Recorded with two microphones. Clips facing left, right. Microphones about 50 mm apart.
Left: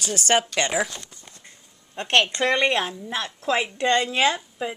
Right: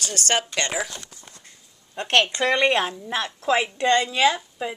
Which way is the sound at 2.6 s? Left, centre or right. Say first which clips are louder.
Right 2 dB; centre.